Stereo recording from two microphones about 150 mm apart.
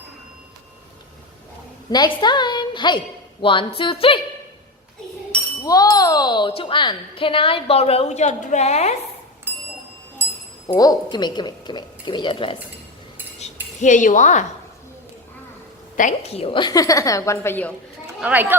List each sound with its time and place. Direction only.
1.9 s speech: 30° left (ahead or behind)
5.6 s speech: 25° left (ahead or behind); by 9.0 s 45° left (ahead or behind)
9.5 s bicycle bell: 15° right (ahead or behind)
10.2 s wind chime: 15° right (ahead or behind)
10.8 s a woman's voice: 25° left (ahead or behind)
13.8 s speech: 55° left (ahead or behind)
16.0 s speech: 55° left (ahead or behind)
16.3 s a woman's voice: 40° left (ahead or behind); by 17.7 s 10° left (ahead or behind)
18.2 s speech: 10° right (ahead or behind)